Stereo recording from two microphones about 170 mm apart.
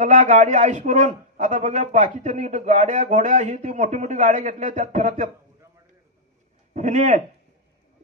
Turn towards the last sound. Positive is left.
turn(degrees=-45)  # may be behind; listen again after turning